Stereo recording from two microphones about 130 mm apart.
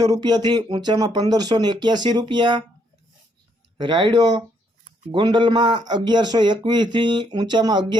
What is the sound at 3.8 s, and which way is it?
Speech, 35° right (ahead or behind).